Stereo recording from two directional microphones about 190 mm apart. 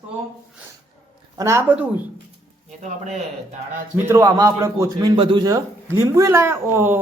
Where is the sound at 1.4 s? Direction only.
15° right (ahead or behind).